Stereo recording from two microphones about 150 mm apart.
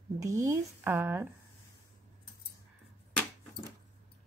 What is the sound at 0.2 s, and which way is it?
A woman's voice, 20° right (ahead or behind).